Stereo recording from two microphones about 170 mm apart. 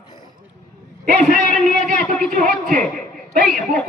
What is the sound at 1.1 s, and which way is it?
Speech, 50° right (ahead or behind).